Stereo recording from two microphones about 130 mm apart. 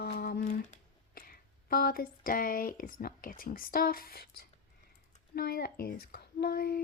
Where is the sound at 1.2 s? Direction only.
90° left.